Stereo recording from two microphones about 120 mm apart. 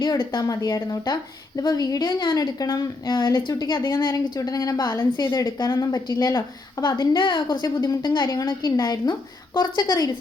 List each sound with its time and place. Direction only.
0.3 s a woman's voice: 30° left (ahead or behind)